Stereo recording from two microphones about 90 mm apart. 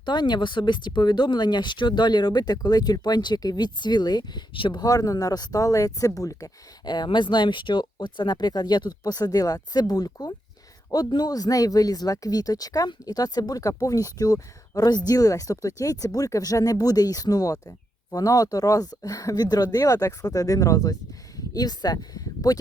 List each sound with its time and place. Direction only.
0.0 s speech: 55° left (ahead or behind)
4.5 s speech: 75° left (ahead or behind)
4.8 s speech: 45° left (ahead or behind)
6.8 s speech: 50° left (ahead or behind)